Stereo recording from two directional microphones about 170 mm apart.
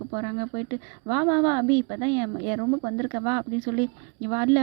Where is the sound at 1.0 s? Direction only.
25° right (ahead or behind).